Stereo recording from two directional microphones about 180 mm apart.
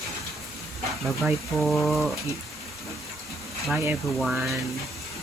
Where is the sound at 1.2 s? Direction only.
Centre (ahead or behind).